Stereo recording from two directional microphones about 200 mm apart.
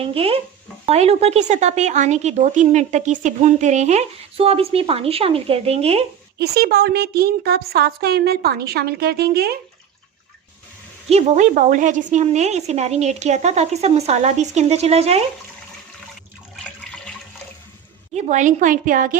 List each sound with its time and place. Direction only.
0.0 s speech: 30° right (ahead or behind)
6.4 s a woman's voice: 55° right (ahead or behind)
11.1 s speech: 35° right (ahead or behind)
18.1 s speech: 35° right (ahead or behind)